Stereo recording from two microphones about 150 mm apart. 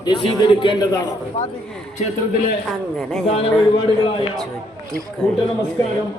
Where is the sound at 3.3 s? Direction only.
40° left (ahead or behind).